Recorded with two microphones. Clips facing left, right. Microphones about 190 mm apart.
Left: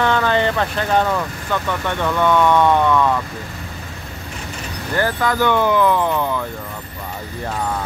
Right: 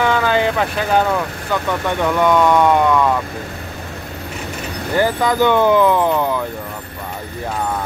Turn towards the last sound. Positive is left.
turn(degrees=-15)  # may be behind; listen again after turning